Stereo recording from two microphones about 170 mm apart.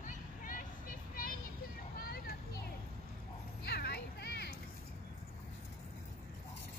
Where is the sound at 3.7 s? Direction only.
70° left (ahead or behind).